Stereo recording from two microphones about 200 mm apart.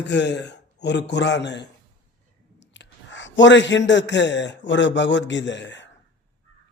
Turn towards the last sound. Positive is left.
turn(degrees=65)  # may be behind; listen again after turning